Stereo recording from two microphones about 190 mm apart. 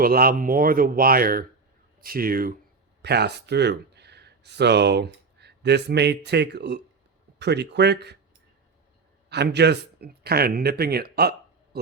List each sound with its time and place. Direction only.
0.0 s speech: 50° right (ahead or behind)
3.0 s speech: 60° right (ahead or behind)
9.3 s speech: 60° right (ahead or behind)